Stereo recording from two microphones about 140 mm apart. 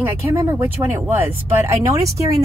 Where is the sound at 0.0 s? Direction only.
15° right (ahead or behind).